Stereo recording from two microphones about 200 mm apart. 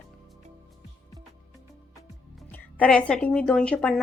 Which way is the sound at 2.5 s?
5° left (ahead or behind).